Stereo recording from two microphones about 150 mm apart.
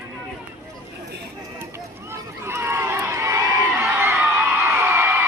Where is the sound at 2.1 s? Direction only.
15° right (ahead or behind).